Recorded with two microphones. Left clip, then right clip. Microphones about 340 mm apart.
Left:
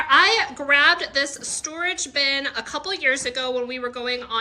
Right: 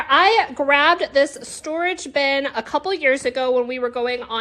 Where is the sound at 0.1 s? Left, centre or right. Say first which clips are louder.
Right 2 dB; centre.